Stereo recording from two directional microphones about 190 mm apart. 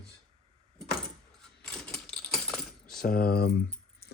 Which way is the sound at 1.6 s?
5° left (ahead or behind).